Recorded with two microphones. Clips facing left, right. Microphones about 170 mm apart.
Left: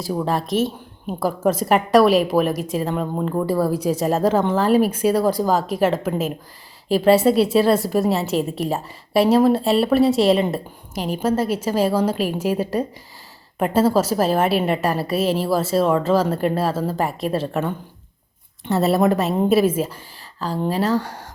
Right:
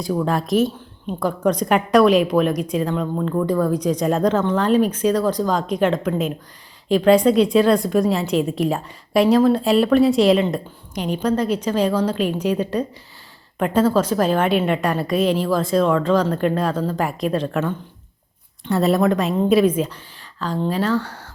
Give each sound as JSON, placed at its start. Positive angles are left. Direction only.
{"t": 0.0, "sound": "a woman's voice", "side_deg": 5}
{"t": 18.7, "sound": "a woman's voice", "side_deg": 5}
{"t": 20.7, "sound": "speech", "side_deg": 35}
{"t": 20.9, "sound": "a woman's voice", "side_deg": 10}